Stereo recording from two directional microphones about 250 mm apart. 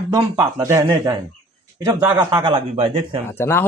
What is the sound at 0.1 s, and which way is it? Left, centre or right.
A man's voice, centre.